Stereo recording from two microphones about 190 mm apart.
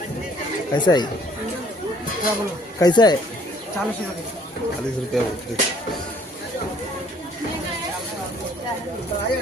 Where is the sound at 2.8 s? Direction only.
20° left (ahead or behind).